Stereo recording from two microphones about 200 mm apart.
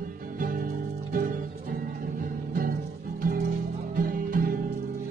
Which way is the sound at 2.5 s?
45° right (ahead or behind).